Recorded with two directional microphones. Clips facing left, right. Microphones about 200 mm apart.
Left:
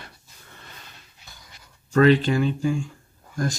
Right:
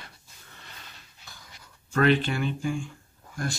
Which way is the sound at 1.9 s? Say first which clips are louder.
Left 6 dB; 40° left (ahead or behind).